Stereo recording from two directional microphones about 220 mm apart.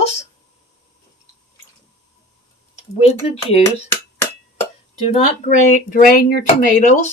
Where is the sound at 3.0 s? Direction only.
30° left (ahead or behind).